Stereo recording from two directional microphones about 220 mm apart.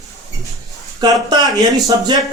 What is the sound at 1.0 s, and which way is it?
Speech, 20° right (ahead or behind).